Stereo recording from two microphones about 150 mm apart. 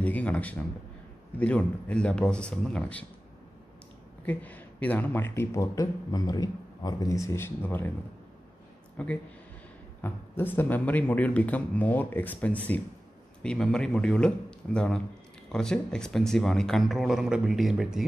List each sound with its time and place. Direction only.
0.0 s speech: 10° left (ahead or behind)
4.3 s speech: 10° left (ahead or behind)
8.9 s a man's voice: 10° left (ahead or behind)